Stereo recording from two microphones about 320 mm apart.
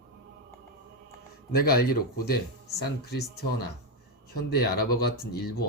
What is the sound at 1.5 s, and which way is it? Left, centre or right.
Speech, left.